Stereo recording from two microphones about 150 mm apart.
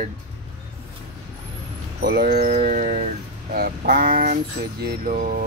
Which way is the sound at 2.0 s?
90° right.